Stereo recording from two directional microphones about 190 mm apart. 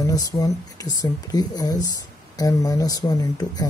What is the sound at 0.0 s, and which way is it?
Speech, 20° left (ahead or behind).